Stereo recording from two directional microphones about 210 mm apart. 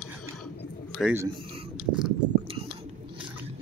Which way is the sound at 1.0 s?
10° right (ahead or behind).